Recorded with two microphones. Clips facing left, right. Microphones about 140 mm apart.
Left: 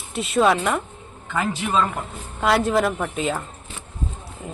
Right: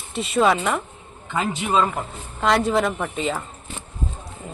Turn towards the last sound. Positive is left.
turn(degrees=0)  # may be behind; listen again after turning